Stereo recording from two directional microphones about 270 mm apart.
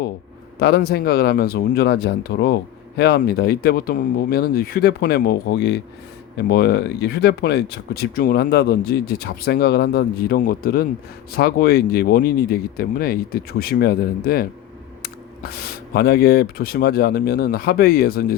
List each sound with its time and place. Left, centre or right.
0.6 s speech: left
16.0 s speech: left